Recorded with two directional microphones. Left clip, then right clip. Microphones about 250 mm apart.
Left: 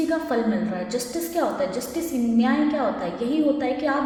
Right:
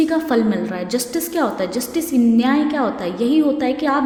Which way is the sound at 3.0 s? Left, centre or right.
Right.